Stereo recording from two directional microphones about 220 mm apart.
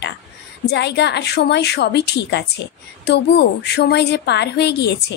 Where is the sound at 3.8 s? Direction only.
50° left (ahead or behind).